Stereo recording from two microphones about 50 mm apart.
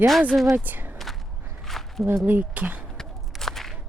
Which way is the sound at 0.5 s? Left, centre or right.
Right.